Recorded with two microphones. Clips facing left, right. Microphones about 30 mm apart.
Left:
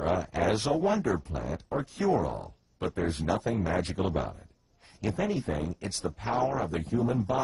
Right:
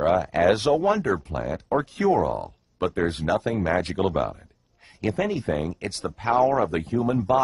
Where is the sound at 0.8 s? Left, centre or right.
Right.